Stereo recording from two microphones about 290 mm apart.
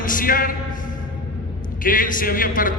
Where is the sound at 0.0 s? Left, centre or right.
Left.